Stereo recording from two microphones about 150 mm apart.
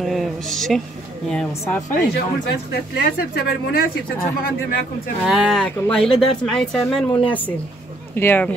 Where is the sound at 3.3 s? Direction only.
85° left.